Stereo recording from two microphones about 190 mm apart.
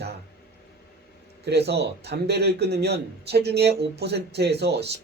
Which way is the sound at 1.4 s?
60° right (ahead or behind).